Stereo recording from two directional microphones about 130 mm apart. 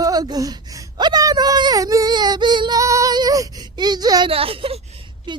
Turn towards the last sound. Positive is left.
turn(degrees=-35)  # may be behind; listen again after turning